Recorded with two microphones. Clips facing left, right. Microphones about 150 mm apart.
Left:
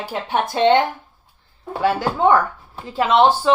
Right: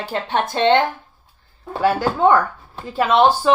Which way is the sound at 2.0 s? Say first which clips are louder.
Even; 15° left (ahead or behind).